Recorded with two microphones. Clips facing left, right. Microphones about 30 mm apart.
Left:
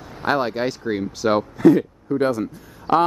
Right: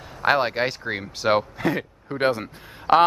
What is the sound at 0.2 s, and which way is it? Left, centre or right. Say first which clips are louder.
Speech: right 1 dB; right.